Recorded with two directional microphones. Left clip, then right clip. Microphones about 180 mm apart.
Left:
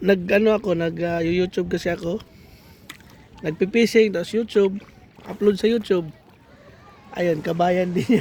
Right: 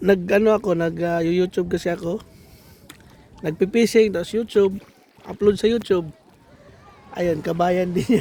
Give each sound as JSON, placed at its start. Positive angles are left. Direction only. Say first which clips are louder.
{"t": 0.0, "sound": "speech", "louder": "right 1 dB", "side_deg": -10}
{"t": 3.4, "sound": "a man's voice", "louder": "right 1 dB", "side_deg": -15}
{"t": 7.1, "sound": "a man's voice", "louder": "even", "side_deg": 0}